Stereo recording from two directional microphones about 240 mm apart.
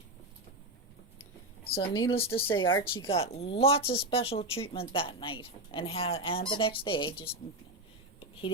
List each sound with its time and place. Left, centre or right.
1.7 s speech: left